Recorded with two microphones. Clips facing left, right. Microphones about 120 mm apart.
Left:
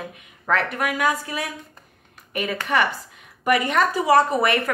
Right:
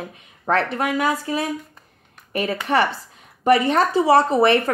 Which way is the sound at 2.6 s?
35° right (ahead or behind).